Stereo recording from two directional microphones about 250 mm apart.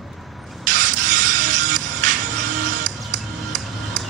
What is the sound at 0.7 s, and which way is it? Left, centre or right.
Music, right.